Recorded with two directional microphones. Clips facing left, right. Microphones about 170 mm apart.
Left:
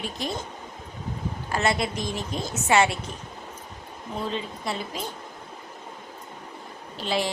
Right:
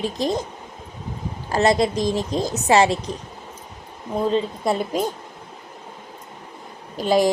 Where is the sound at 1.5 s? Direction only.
35° right (ahead or behind).